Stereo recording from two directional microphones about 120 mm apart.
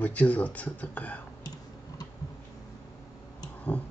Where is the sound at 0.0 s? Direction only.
10° left (ahead or behind).